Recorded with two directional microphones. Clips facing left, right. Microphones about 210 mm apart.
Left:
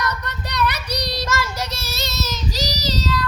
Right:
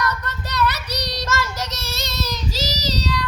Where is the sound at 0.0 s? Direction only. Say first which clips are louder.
Right 1 dB; 15° left (ahead or behind).